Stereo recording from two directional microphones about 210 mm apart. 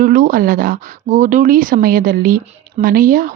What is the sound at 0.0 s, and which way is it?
Speech, 40° right (ahead or behind).